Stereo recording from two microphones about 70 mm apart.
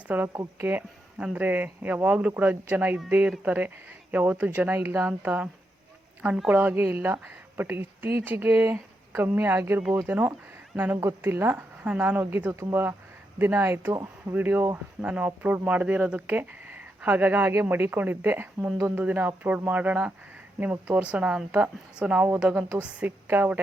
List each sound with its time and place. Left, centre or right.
0.1 s speech: right
6.5 s speech: right
13.9 s speech: right
14.3 s speech: right
15.0 s a woman's voice: right